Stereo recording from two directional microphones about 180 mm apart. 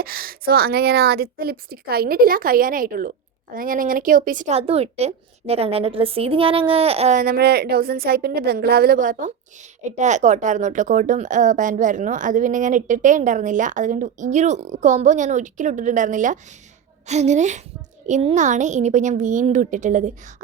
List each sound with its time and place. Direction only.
0.0 s a woman's voice: 55° right (ahead or behind); by 7.2 s 35° right (ahead or behind)
7.2 s a woman's voice: 60° right (ahead or behind); by 20.3 s 45° right (ahead or behind)